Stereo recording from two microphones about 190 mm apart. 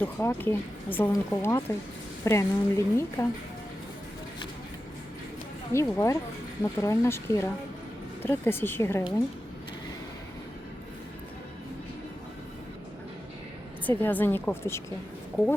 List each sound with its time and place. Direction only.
0.0 s speech: 10° left (ahead or behind)
5.7 s speech: 15° left (ahead or behind)
13.8 s speech: 10° left (ahead or behind)